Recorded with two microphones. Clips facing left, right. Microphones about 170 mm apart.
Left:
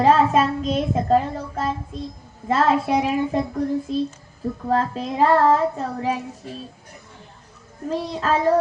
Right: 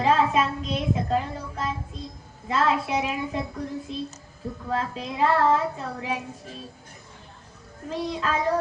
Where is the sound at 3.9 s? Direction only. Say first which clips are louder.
Left 9 dB; 40° left (ahead or behind).